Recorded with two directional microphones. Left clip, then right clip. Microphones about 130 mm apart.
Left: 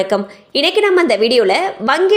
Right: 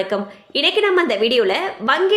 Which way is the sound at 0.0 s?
55° left (ahead or behind).